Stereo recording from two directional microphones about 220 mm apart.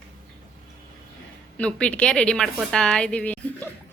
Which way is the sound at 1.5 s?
5° left (ahead or behind).